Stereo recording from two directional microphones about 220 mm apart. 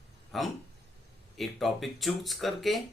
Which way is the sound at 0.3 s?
Centre (ahead or behind).